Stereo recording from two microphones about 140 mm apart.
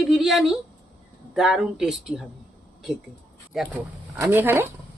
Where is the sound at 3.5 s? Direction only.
5° right (ahead or behind).